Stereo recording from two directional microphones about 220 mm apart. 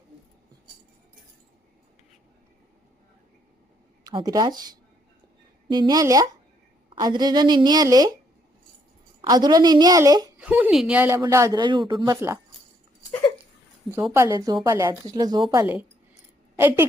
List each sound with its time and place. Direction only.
4.0 s speech: 15° right (ahead or behind)
5.6 s speech: 20° right (ahead or behind)
9.2 s speech: 20° right (ahead or behind)
13.9 s speech: 10° right (ahead or behind)